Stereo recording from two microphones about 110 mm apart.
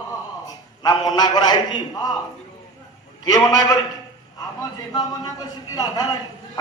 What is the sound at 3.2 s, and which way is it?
Speech, 35° left (ahead or behind).